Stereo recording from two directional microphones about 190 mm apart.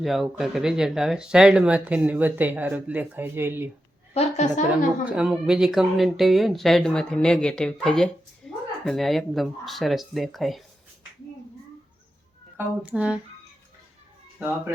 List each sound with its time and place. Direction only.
0.0 s speech: centre (ahead or behind)
4.1 s a woman's voice: 35° left (ahead or behind)
5.0 s speech: 5° right (ahead or behind)
8.4 s a sound: centre (ahead or behind)
8.8 s speech: centre (ahead or behind)
12.5 s speech: 5° right (ahead or behind)
14.3 s speech: 10° right (ahead or behind)